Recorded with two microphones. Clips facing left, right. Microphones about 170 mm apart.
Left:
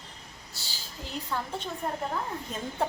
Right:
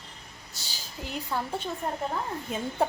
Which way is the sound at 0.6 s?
15° right (ahead or behind).